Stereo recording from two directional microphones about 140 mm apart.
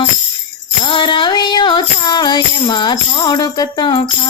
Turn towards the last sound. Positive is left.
turn(degrees=35)  # may be behind; listen again after turning